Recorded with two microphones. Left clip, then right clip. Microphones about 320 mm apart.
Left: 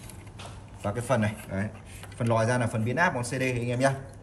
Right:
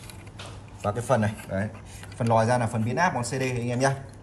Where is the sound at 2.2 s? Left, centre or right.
Centre.